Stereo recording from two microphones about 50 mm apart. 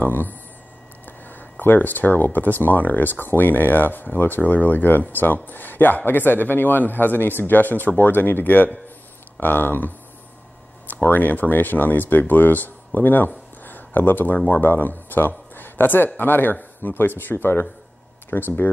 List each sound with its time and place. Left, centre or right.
0.0 s speech: left